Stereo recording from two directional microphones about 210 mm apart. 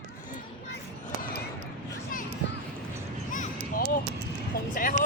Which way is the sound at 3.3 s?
40° left (ahead or behind).